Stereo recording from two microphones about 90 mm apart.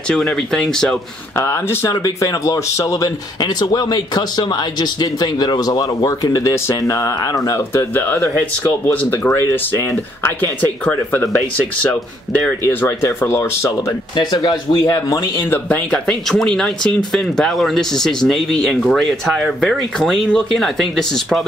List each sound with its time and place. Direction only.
0.1 s speech: 5° left (ahead or behind)
1.3 s speech: 30° left (ahead or behind)
7.7 s speech: 25° left (ahead or behind)
10.4 s speech: 20° left (ahead or behind)
12.6 s speech: 30° left (ahead or behind)
14.1 s speech: 55° left (ahead or behind)
15.5 s speech: 15° left (ahead or behind)